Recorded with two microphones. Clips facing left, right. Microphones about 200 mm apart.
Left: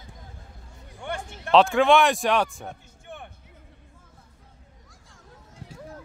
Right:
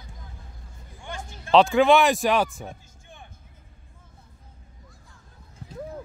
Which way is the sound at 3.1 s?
65° left (ahead or behind).